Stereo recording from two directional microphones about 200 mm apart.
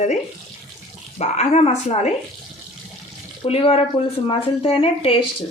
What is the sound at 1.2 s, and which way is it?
Speech, 35° left (ahead or behind).